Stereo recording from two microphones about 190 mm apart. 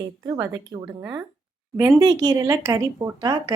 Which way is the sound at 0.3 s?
15° right (ahead or behind).